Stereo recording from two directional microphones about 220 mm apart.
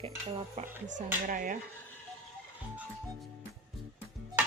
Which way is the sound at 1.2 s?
40° right (ahead or behind).